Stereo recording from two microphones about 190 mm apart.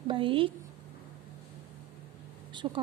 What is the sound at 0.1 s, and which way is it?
Speech, 25° right (ahead or behind).